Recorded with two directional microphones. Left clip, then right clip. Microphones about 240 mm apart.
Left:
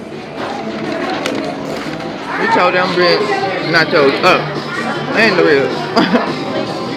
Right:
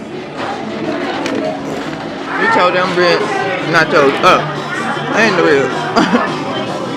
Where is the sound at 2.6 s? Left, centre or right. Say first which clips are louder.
Left 1 dB; centre.